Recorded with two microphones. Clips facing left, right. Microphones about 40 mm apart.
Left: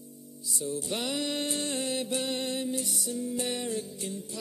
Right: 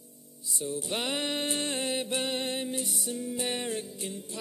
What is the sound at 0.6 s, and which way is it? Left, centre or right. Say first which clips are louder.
Music: even; right.